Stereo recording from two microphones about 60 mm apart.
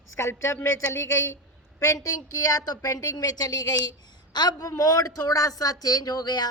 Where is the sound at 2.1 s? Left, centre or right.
Left.